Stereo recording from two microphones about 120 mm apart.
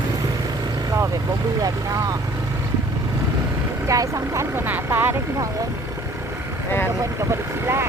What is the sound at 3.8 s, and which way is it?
Speech, 25° right (ahead or behind).